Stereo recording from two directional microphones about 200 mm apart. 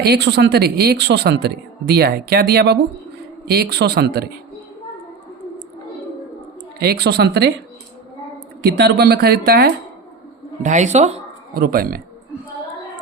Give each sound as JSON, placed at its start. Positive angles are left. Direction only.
{"t": 0.0, "sound": "a woman's voice", "side_deg": -55}
{"t": 6.7, "sound": "a woman's voice", "side_deg": -55}
{"t": 8.6, "sound": "a woman's voice", "side_deg": -55}
{"t": 10.6, "sound": "speech", "side_deg": -35}
{"t": 11.5, "sound": "a woman's voice", "side_deg": -45}